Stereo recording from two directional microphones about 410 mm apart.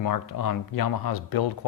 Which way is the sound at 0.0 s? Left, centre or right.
Left.